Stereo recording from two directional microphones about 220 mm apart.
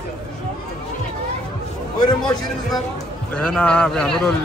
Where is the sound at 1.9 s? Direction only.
20° left (ahead or behind).